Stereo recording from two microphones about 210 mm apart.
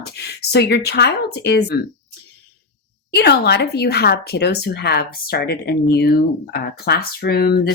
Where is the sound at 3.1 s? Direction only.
50° left (ahead or behind).